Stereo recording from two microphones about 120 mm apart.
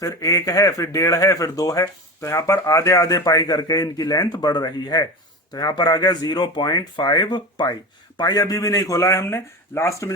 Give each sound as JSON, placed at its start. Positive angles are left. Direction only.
{"t": 0.0, "sound": "speech", "side_deg": 30}